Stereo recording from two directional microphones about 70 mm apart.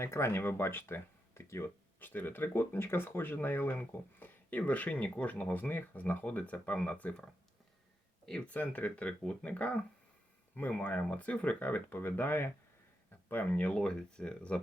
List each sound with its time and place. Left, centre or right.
0.0 s speech: left
2.0 s speech: left
3.8 s speech: centre
8.4 s speech: left
13.7 s speech: centre